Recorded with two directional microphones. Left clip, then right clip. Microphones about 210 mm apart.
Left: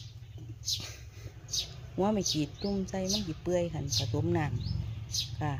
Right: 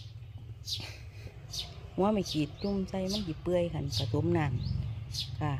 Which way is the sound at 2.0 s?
10° right (ahead or behind).